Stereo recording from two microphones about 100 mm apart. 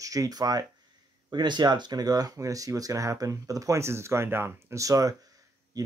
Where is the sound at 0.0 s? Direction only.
35° right (ahead or behind).